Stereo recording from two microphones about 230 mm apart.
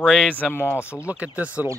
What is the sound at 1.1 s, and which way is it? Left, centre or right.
Speech, centre.